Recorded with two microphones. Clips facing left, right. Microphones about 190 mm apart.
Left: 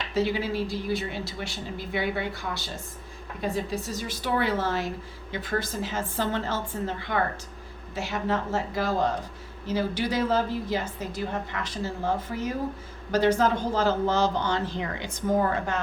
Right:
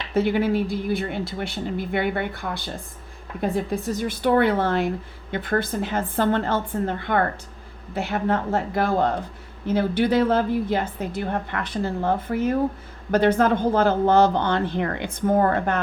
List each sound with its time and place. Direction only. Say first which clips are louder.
0.1 s a woman's voice: right 6 dB; 55° right (ahead or behind)